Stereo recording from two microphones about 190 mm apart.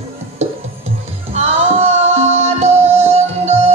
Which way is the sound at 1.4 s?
35° right (ahead or behind).